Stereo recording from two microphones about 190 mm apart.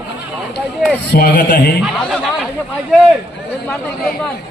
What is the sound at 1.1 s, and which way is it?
Speech, 60° left (ahead or behind).